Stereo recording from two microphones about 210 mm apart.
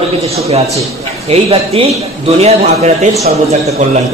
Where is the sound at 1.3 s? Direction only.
30° right (ahead or behind).